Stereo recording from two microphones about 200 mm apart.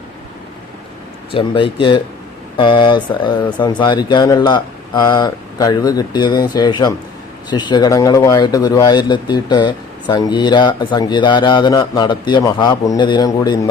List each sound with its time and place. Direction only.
1.3 s speech: 25° left (ahead or behind)